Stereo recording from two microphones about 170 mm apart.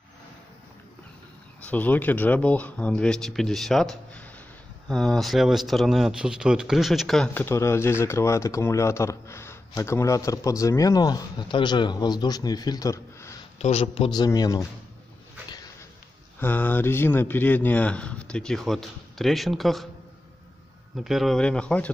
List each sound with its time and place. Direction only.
1.6 s a man's voice: 10° left (ahead or behind)
7.4 s speech: 15° left (ahead or behind)
13.6 s speech: 35° left (ahead or behind); by 14.7 s 20° left (ahead or behind)
15.4 s a sound: 25° left (ahead or behind)
16.3 s a man's voice: 10° left (ahead or behind)
20.9 s speech: centre (ahead or behind)